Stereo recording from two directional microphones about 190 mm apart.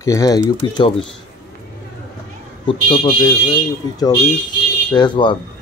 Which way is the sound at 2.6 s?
25° left (ahead or behind).